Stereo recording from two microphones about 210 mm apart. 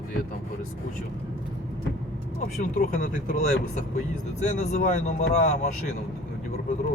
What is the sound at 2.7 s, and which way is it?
Speech, 40° left (ahead or behind).